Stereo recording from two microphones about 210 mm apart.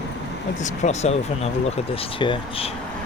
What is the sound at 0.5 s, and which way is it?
Speech, 35° left (ahead or behind).